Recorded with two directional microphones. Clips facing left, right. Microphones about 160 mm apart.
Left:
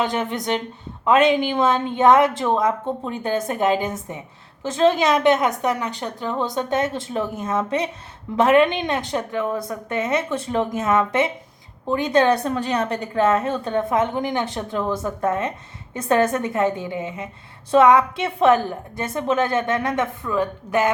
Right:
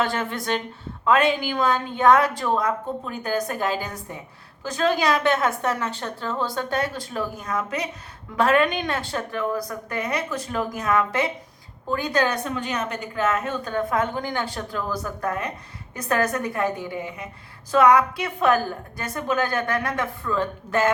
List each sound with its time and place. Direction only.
0.0 s a woman's voice: 20° left (ahead or behind)